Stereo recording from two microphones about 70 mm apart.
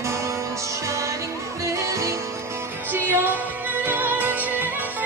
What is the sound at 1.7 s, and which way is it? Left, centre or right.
Music, right.